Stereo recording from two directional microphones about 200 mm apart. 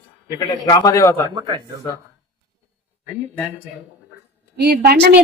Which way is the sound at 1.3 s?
20° right (ahead or behind).